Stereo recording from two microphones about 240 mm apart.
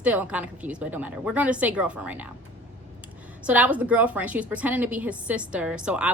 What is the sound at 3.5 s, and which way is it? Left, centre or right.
A woman's voice, centre.